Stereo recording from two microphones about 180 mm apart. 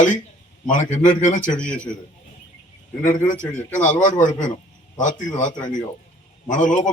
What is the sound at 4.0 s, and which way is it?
A man's voice, 45° left (ahead or behind).